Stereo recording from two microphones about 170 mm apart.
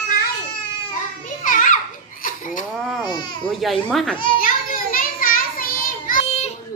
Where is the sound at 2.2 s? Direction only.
55° left (ahead or behind).